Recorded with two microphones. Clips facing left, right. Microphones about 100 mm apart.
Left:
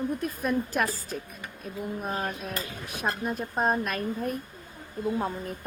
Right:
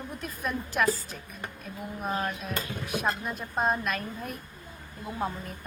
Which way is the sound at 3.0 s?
45° left (ahead or behind).